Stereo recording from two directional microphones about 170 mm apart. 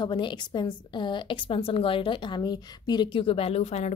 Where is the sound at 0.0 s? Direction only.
25° left (ahead or behind).